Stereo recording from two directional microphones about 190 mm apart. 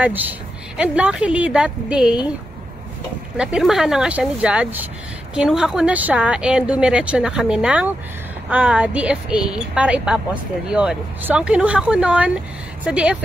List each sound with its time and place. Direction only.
0.0 s a woman's voice: 10° right (ahead or behind)
3.3 s speech: 5° right (ahead or behind)